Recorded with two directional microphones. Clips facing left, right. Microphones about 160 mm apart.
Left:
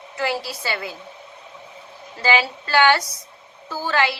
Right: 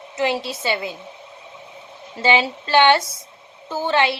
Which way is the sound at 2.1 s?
25° right (ahead or behind).